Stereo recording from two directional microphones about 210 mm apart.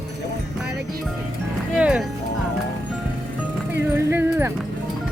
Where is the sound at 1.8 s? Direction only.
5° right (ahead or behind).